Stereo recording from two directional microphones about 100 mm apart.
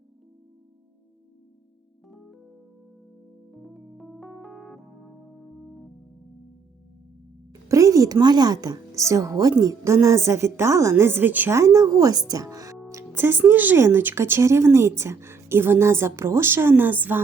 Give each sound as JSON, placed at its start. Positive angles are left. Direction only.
{"t": 2.0, "sound": "music", "side_deg": 0}
{"t": 3.5, "sound": "keyboard", "side_deg": 0}
{"t": 5.4, "sound": "music", "side_deg": -5}
{"t": 7.7, "sound": "speech", "side_deg": -35}
{"t": 11.5, "sound": "speech", "side_deg": -30}
{"t": 12.9, "sound": "speech", "side_deg": -25}